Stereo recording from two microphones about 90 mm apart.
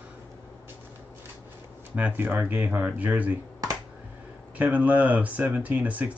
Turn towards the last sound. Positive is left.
turn(degrees=-15)  # may be behind; listen again after turning